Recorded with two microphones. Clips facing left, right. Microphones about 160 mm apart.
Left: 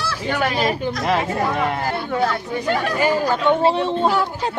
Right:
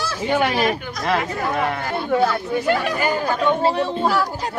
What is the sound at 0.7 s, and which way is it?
Speech, 30° left (ahead or behind).